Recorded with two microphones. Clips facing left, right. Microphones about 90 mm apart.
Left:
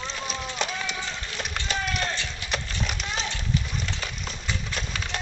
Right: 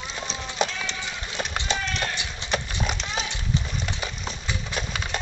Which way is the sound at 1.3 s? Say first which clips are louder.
Right 4 dB; 25° right (ahead or behind).